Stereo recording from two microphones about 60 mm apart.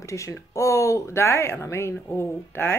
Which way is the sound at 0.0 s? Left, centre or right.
Left.